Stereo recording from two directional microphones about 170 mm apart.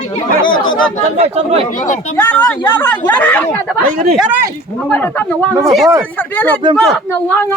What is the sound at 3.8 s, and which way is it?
Speech, 55° right (ahead or behind).